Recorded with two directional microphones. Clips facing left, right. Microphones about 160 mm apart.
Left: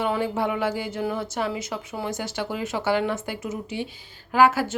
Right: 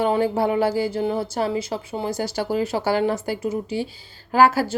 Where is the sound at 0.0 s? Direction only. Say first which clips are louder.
Right 5 dB; 35° right (ahead or behind).